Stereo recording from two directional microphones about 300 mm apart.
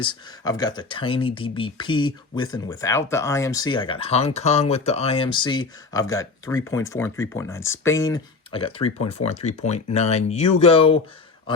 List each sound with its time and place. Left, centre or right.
0.0 s speech: centre